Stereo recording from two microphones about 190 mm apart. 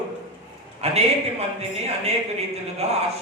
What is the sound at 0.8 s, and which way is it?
Speech, 35° right (ahead or behind).